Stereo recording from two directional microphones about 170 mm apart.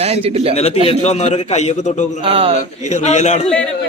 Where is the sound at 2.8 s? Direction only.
45° left (ahead or behind).